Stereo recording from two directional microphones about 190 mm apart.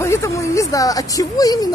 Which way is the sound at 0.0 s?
15° left (ahead or behind).